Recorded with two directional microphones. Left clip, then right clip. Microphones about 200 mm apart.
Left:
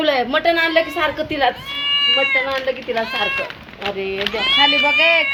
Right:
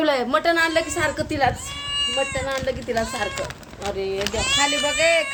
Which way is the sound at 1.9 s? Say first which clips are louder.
Left 7 dB; 25° right (ahead or behind).